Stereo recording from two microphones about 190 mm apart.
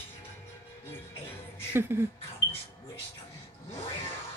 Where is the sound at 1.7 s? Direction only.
10° right (ahead or behind).